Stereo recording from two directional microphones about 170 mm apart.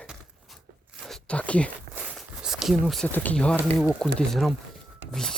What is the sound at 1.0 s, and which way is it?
Zipper, 5° left (ahead or behind).